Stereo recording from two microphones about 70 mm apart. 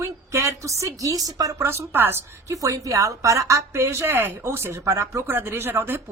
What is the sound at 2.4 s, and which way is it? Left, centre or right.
A woman's voice, right.